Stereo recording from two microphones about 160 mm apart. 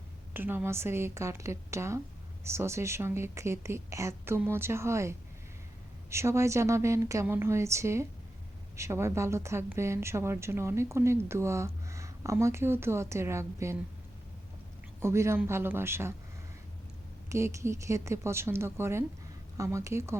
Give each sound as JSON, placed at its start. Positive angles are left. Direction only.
{"t": 0.3, "sound": "a woman's voice", "side_deg": -15}
{"t": 15.0, "sound": "a woman's voice", "side_deg": -15}
{"t": 17.2, "sound": "a woman's voice", "side_deg": -20}